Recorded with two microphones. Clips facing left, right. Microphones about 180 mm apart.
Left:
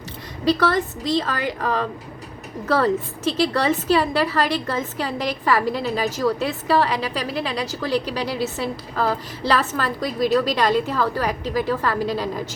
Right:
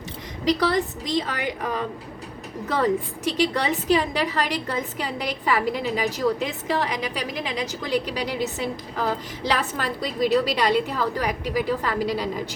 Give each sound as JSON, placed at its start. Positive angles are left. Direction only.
{"t": 0.4, "sound": "a woman's voice", "side_deg": -15}